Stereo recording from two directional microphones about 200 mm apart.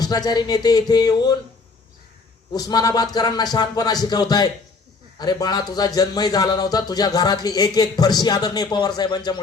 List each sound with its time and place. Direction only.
0.0 s speech: 20° left (ahead or behind)
2.5 s speech: 20° left (ahead or behind)